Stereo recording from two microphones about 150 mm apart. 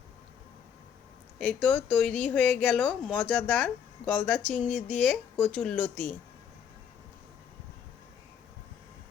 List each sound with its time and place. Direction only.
1.4 s speech: 10° left (ahead or behind)